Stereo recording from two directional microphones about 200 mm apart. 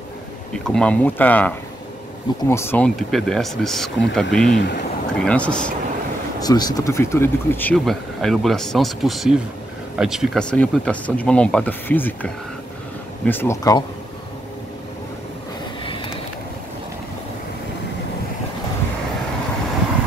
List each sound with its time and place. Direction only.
0.5 s speech: 5° left (ahead or behind)
4.6 s speech: 60° left (ahead or behind)
5.2 s speech: 5° left (ahead or behind)
6.4 s speech: 20° left (ahead or behind)
15.8 s vehicle: 25° left (ahead or behind)